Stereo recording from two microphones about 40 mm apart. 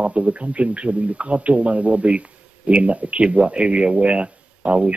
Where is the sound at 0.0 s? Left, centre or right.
Right.